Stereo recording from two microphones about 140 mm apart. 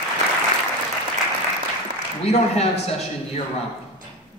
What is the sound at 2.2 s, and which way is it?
Speech, 50° left (ahead or behind).